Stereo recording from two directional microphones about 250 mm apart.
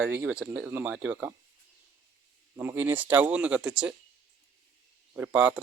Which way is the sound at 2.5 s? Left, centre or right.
Centre.